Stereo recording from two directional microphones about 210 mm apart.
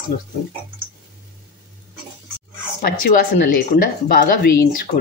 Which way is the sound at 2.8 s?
40° left (ahead or behind).